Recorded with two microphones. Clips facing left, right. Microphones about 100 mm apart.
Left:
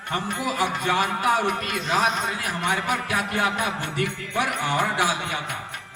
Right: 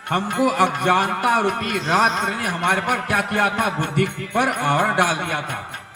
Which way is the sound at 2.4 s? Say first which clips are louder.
Right 5 dB; 55° right (ahead or behind).